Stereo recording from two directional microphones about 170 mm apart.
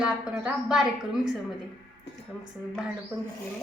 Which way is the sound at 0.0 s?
5° right (ahead or behind).